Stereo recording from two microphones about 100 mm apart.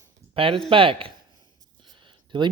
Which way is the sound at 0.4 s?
65° right (ahead or behind).